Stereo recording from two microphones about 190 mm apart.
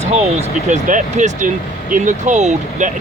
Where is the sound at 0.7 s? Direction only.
40° right (ahead or behind).